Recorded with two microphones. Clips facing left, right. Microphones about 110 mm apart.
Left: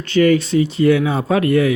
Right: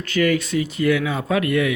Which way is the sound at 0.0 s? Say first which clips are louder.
Left 6 dB; 30° left (ahead or behind).